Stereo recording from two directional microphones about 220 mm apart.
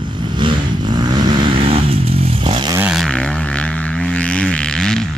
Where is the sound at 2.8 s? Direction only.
Centre (ahead or behind).